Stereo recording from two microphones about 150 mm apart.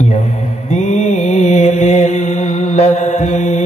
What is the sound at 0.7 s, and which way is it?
Mantra, 55° left (ahead or behind).